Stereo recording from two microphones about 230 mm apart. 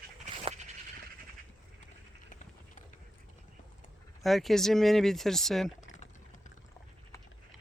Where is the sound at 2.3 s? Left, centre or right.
Left.